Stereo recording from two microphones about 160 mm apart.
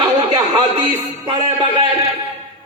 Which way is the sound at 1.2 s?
30° right (ahead or behind).